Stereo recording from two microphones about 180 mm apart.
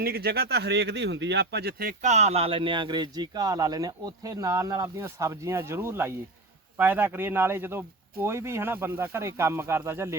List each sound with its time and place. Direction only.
0.0 s speech: 60° right (ahead or behind); by 10.2 s 15° right (ahead or behind)